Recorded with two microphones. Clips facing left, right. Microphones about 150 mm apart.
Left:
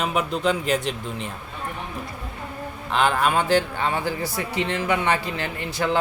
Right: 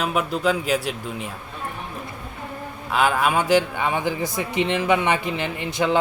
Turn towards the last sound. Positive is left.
turn(degrees=-20)  # may be behind; listen again after turning